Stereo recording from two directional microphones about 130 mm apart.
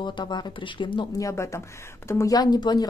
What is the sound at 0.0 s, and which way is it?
A woman's voice, 35° left (ahead or behind).